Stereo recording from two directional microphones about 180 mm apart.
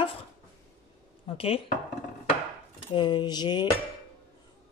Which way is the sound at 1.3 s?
30° left (ahead or behind).